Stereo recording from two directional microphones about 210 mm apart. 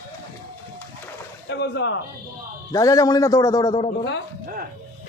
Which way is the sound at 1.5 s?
55° left (ahead or behind).